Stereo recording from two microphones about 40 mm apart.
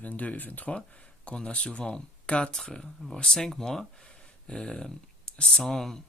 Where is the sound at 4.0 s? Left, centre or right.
Left.